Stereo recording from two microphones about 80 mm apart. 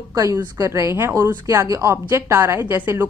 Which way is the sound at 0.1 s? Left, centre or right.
Right.